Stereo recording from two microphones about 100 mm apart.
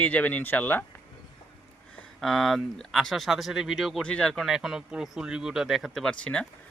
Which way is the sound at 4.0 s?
10° left (ahead or behind).